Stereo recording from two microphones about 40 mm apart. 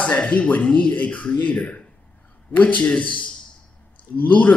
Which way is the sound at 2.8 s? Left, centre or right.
Left.